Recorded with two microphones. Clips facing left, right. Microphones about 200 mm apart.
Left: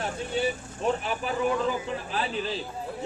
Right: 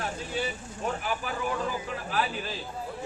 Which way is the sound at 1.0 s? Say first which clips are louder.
Left 4 dB; 25° left (ahead or behind).